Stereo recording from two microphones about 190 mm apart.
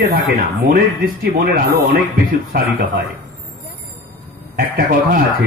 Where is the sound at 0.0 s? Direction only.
55° right (ahead or behind).